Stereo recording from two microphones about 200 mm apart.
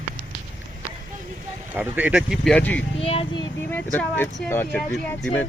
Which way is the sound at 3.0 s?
30° left (ahead or behind).